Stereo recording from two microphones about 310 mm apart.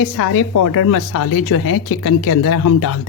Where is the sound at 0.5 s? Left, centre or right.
Left.